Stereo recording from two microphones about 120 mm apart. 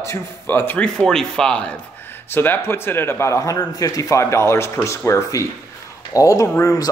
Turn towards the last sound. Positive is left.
turn(degrees=25)  # may be behind; listen again after turning